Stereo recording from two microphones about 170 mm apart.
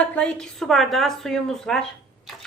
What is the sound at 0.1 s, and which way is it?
A woman's voice, 5° left (ahead or behind).